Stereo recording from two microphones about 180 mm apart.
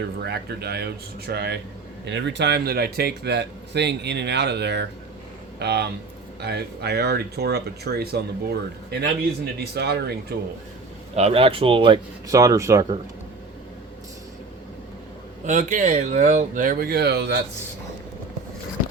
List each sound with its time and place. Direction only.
0.2 s speech: 65° right (ahead or behind)
2.0 s speech: 75° right (ahead or behind)
11.1 s speech: 35° right (ahead or behind); by 13.0 s 15° right (ahead or behind)
15.4 s speech: 45° right (ahead or behind); by 17.4 s 70° right (ahead or behind)